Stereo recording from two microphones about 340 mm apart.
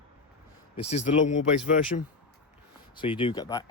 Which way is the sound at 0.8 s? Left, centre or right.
Centre.